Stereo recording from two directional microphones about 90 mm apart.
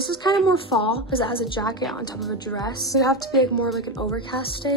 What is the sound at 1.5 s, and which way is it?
Speech, 50° left (ahead or behind).